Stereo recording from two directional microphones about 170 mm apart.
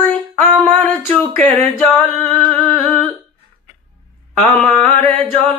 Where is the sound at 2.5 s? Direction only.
5° left (ahead or behind).